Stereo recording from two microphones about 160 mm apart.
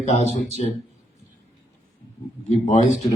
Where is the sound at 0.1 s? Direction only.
45° left (ahead or behind).